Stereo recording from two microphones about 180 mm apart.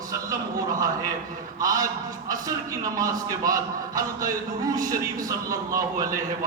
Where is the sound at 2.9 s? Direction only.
20° right (ahead or behind).